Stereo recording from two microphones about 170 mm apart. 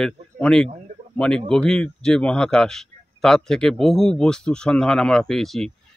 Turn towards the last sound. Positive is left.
turn(degrees=0)  # may be behind; listen again after turning